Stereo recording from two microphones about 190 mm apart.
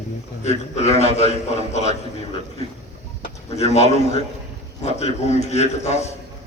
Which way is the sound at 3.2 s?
35° left (ahead or behind).